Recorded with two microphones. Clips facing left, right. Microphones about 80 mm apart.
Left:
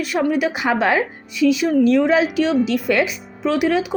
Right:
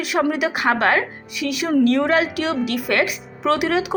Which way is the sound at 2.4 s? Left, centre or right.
Right.